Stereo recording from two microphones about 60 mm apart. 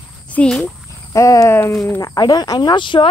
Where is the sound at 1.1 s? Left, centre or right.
Left.